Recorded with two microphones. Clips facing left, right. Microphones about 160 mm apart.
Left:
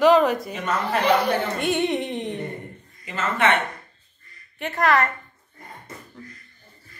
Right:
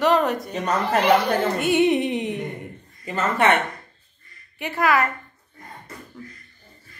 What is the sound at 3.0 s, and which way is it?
Speech, 40° right (ahead or behind).